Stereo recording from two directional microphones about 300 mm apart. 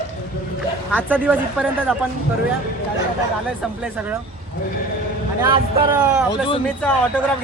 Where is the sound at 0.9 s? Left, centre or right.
Centre.